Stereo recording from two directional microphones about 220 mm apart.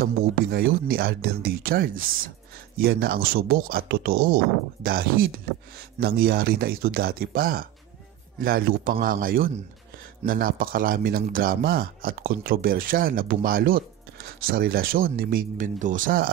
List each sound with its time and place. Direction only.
0.0 s speech: 45° right (ahead or behind)